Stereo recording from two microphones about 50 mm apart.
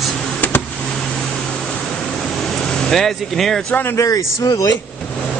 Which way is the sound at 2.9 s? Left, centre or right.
Centre.